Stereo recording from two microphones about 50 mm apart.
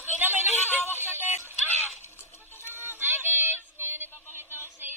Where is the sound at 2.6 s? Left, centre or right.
Left.